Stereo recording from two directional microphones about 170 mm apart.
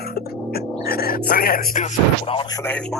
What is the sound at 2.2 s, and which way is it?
Speech, 30° left (ahead or behind).